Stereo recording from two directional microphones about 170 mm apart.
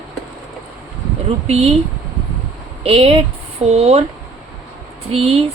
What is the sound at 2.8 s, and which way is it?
Speech, 35° right (ahead or behind).